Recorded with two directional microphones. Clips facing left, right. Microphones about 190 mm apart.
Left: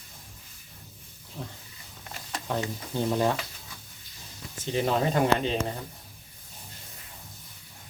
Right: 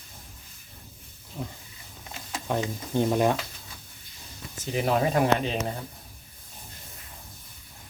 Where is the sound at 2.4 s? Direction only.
15° right (ahead or behind).